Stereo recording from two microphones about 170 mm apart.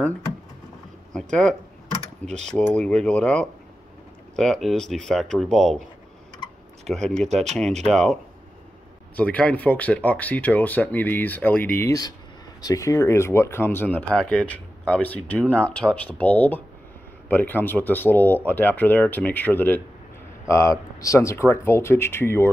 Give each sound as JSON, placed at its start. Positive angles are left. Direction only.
{"t": 1.1, "sound": "speech", "side_deg": 5}